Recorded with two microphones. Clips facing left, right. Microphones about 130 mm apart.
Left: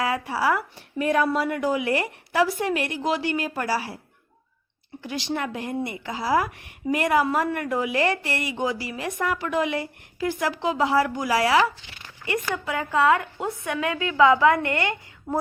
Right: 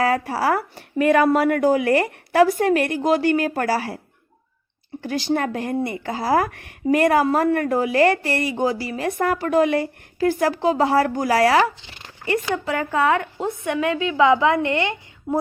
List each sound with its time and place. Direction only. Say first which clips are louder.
0.0 s a woman's voice: right 4 dB; 45° right (ahead or behind)
0.9 s a woman's voice: right 6 dB; 75° right (ahead or behind); by 3.9 s 50° right (ahead or behind)
5.0 s a woman's voice: right 6 dB; 45° right (ahead or behind)
11.8 s a sound: right 3 dB; 35° right (ahead or behind)
13.1 s a woman's voice: right 4 dB; 25° right (ahead or behind)